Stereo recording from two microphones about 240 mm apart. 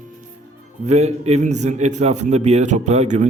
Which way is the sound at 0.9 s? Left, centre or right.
Right.